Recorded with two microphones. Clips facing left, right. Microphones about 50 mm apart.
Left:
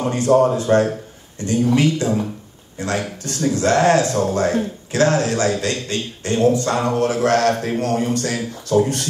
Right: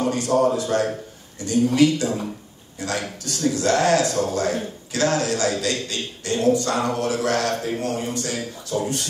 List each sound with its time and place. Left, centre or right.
0.1 s speech: left